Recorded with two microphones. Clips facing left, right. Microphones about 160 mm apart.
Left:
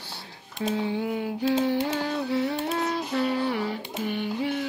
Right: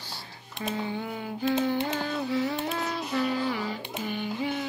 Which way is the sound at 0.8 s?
70° left (ahead or behind).